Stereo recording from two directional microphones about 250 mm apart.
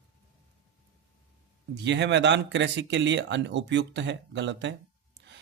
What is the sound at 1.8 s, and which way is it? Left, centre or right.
Speech, right.